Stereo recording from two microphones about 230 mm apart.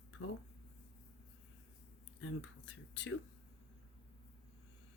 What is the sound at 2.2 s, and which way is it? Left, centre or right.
Speech, left.